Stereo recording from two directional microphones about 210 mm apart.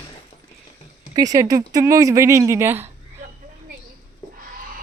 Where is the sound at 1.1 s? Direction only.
15° right (ahead or behind).